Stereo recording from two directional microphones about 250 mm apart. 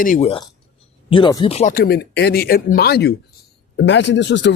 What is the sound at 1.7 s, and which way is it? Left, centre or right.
Speech, left.